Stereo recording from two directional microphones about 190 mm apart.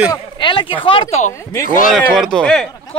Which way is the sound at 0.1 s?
25° left (ahead or behind).